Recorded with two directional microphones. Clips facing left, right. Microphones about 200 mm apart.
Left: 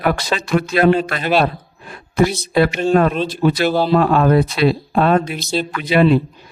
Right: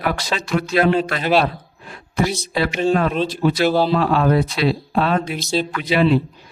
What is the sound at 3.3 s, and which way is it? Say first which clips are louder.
A man's voice: left 1 dB; 55° left (ahead or behind).